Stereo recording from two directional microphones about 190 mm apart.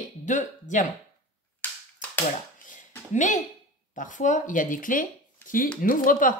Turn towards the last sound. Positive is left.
turn(degrees=45)  # may be behind; listen again after turning